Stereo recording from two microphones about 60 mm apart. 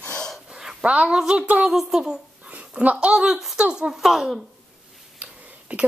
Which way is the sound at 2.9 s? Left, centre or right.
Centre.